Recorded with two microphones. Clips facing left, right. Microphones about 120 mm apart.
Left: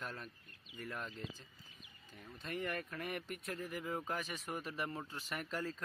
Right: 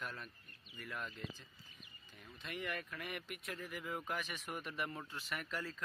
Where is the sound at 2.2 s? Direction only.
40° left (ahead or behind).